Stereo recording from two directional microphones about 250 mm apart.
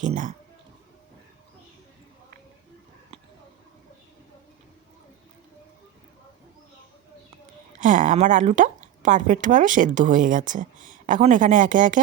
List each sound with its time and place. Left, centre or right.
0.0 s speech: right
7.8 s speech: right